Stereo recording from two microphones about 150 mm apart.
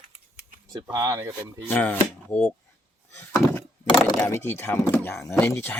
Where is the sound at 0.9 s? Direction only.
20° right (ahead or behind).